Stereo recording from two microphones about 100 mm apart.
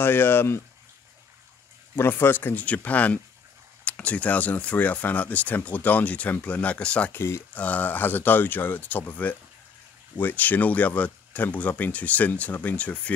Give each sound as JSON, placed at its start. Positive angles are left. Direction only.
{"t": 0.0, "sound": "speech", "side_deg": 20}
{"t": 2.0, "sound": "speech", "side_deg": 20}
{"t": 7.2, "sound": "speech", "side_deg": 25}
{"t": 7.5, "sound": "speech", "side_deg": 15}